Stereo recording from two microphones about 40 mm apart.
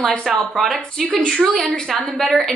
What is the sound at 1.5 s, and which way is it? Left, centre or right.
Speech, left.